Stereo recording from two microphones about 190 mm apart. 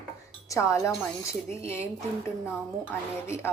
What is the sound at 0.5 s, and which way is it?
A woman's voice, 15° left (ahead or behind).